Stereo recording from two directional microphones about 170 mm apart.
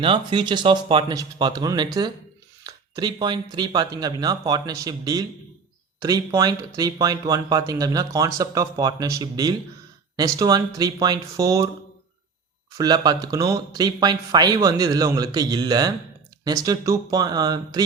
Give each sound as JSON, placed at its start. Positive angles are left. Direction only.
{"t": 0.0, "sound": "speech", "side_deg": -30}
{"t": 12.7, "sound": "speech", "side_deg": -25}